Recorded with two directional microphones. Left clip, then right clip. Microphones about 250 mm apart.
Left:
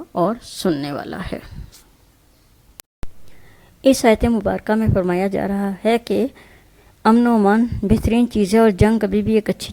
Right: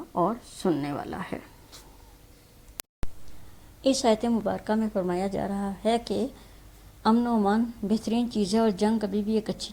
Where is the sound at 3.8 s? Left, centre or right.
Left.